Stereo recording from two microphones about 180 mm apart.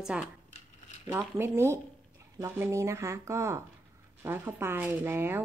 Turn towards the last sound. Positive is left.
turn(degrees=-10)  # may be behind; listen again after turning